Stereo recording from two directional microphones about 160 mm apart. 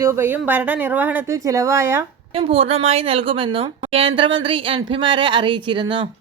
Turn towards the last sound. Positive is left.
turn(degrees=-30)  # may be behind; listen again after turning